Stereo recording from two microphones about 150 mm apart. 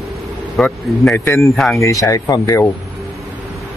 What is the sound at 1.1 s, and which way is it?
Speech, 15° left (ahead or behind).